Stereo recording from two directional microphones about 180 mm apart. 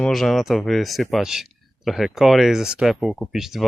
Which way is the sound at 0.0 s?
Centre (ahead or behind).